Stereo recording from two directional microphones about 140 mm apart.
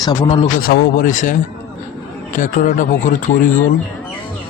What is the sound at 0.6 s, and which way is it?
Speech, 90° left.